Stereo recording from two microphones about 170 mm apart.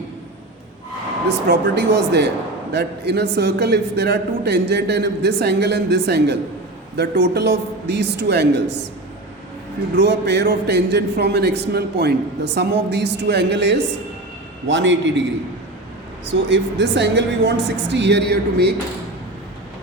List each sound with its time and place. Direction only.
1.5 s a man's voice: 80° right
9.9 s a man's voice: 85° right
16.3 s a woman's voice: 90° right; by 18.7 s 75° right (ahead or behind)